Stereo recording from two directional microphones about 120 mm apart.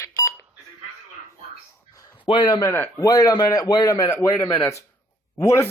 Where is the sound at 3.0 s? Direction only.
30° left (ahead or behind).